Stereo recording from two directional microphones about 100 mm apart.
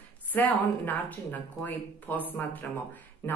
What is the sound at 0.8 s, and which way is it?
Speech, 15° left (ahead or behind).